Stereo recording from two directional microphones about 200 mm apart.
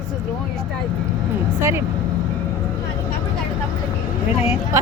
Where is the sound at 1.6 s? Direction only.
15° right (ahead or behind).